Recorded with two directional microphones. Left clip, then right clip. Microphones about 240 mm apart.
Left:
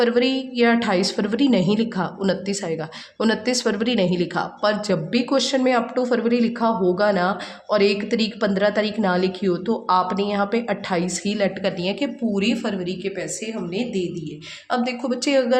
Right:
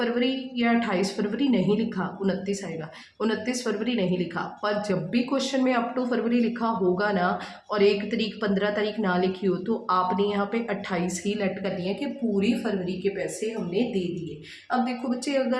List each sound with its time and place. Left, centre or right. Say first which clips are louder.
0.0 s speech: left 7 dB; left
15.2 s speech: left 7 dB; left